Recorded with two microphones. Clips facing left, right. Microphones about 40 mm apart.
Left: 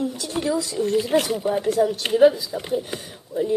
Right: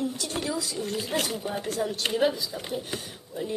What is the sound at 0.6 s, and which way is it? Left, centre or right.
Speech, left.